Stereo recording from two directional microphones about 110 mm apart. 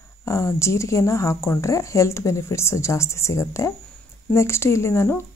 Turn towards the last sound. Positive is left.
turn(degrees=25)  # may be behind; listen again after turning